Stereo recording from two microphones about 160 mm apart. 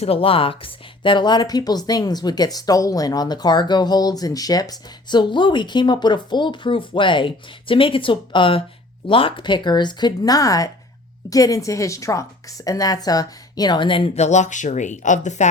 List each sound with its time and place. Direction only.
0.0 s speech: 35° left (ahead or behind)